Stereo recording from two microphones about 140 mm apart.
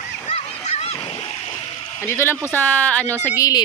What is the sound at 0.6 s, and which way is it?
Splash, 50° left (ahead or behind).